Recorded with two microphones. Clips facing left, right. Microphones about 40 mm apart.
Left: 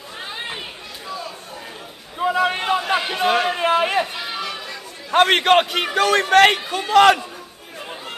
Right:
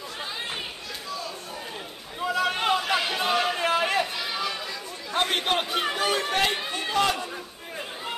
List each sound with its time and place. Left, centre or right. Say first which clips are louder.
2.1 s a sound: left 6 dB; left
3.3 s speech: left 7 dB; left
3.5 s a sound: left 6 dB; left
4.0 s run: left 3 dB; centre
4.4 s chatter: left 2 dB; centre
5.1 s a man's voice: left 11 dB; left
5.9 s a man's voice: left 12 dB; left
6.3 s a man's voice: left 11 dB; left